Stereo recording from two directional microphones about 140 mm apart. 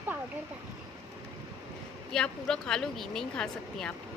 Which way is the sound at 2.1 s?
5° left (ahead or behind).